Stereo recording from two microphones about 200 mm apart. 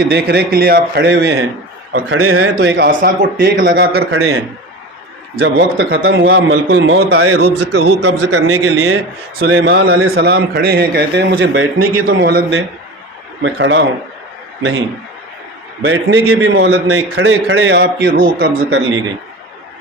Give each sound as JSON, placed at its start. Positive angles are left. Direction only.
{"t": 0.1, "sound": "a man's voice", "side_deg": -50}
{"t": 1.9, "sound": "a man's voice", "side_deg": -85}
{"t": 2.6, "sound": "a man's voice", "side_deg": -55}
{"t": 5.4, "sound": "a man's voice", "side_deg": -75}
{"t": 6.0, "sound": "a man's voice", "side_deg": -50}
{"t": 7.4, "sound": "a man's voice", "side_deg": -60}
{"t": 9.5, "sound": "a man's voice", "side_deg": -90}
{"t": 10.2, "sound": "a man's voice", "side_deg": -50}
{"t": 11.8, "sound": "a man's voice", "side_deg": -50}
{"t": 13.4, "sound": "a man's voice", "side_deg": -65}
{"t": 15.8, "sound": "a man's voice", "side_deg": -60}